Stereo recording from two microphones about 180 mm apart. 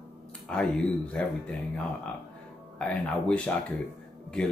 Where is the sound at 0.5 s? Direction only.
5° left (ahead or behind).